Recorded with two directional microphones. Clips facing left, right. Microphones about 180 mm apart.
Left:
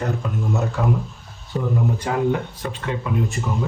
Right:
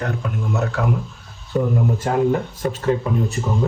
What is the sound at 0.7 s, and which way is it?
Speech, 70° right (ahead or behind).